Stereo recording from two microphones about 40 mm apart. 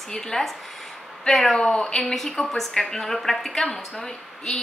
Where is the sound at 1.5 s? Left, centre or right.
Centre.